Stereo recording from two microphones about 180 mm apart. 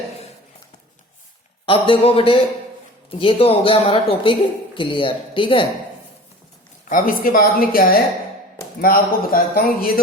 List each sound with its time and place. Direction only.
1.6 s speech: 30° left (ahead or behind)
6.8 s a woman's voice: 50° left (ahead or behind)